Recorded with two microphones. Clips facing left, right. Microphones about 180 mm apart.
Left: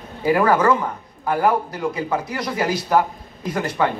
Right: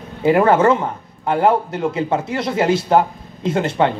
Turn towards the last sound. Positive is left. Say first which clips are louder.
# right 4 dB
turn(degrees=-25)  # may be behind; listen again after turning